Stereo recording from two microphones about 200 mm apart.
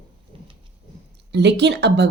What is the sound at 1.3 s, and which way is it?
Speech, 55° right (ahead or behind).